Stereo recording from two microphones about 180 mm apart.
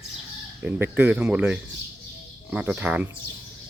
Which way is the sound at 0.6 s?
10° right (ahead or behind).